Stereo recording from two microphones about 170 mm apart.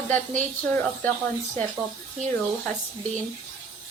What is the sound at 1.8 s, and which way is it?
Speech, 15° left (ahead or behind).